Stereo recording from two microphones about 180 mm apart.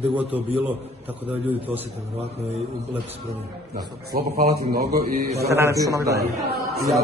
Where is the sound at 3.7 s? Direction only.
55° right (ahead or behind).